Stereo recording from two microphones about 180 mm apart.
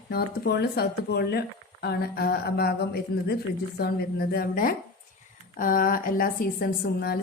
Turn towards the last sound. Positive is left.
turn(degrees=55)  # may be behind; listen again after turning